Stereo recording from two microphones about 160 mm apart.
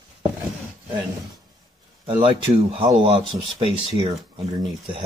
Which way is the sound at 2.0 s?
30° right (ahead or behind).